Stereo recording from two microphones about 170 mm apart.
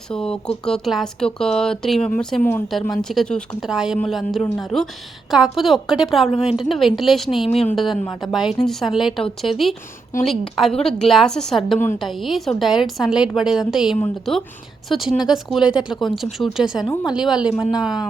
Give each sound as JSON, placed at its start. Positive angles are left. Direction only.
{"t": 0.1, "sound": "speech", "side_deg": 5}